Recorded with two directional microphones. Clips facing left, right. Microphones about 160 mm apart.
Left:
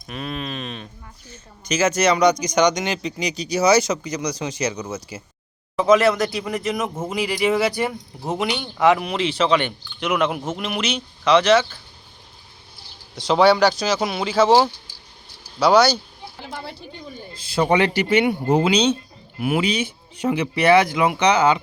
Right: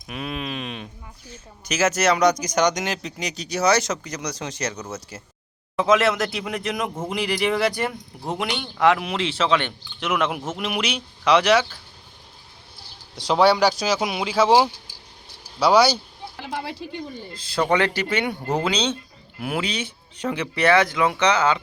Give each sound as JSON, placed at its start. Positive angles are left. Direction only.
{"t": 0.1, "sound": "a sound", "side_deg": -10}
{"t": 1.3, "sound": "speech", "side_deg": -5}
{"t": 13.2, "sound": "speech", "side_deg": -5}
{"t": 16.4, "sound": "speech", "side_deg": -85}
{"t": 17.3, "sound": "speech", "side_deg": 10}